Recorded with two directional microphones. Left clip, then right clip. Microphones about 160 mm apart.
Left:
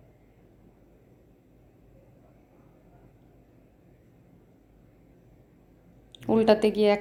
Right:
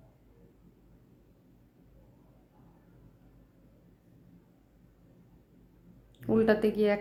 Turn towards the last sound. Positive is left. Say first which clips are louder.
# left 5 dB
turn(degrees=5)  # may be behind; listen again after turning